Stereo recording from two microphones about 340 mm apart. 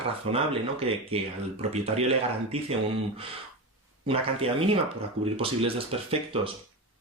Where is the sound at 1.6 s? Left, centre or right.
Centre.